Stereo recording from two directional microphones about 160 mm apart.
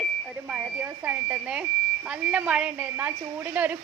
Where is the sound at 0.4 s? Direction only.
10° right (ahead or behind).